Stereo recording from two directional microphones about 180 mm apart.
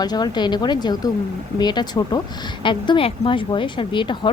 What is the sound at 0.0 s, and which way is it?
Speech, 20° left (ahead or behind).